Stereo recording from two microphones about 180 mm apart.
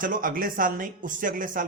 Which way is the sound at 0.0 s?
50° right (ahead or behind).